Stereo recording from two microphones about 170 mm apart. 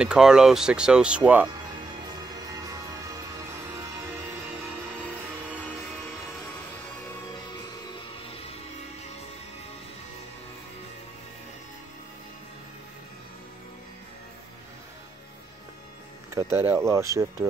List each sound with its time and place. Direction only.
0.0 s speech: 5° right (ahead or behind)
16.3 s speech: 15° right (ahead or behind)